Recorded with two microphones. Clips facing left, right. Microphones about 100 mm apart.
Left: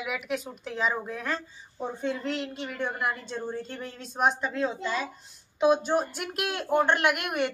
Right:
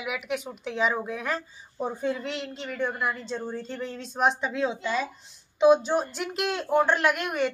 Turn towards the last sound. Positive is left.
turn(degrees=10)  # may be behind; listen again after turning